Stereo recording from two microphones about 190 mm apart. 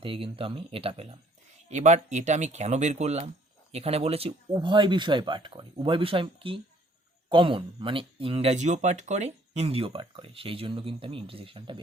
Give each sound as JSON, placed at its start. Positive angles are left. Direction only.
{"t": 0.0, "sound": "speech", "side_deg": -30}